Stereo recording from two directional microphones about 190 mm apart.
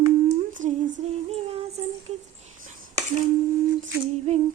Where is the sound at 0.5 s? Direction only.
40° right (ahead or behind).